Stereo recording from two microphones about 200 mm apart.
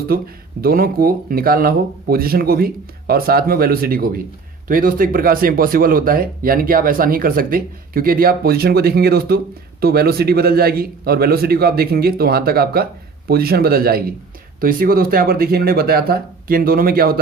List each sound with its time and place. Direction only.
0.1 s speech: 45° right (ahead or behind)